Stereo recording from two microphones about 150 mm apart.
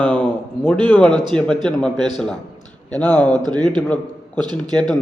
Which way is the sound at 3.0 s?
10° left (ahead or behind).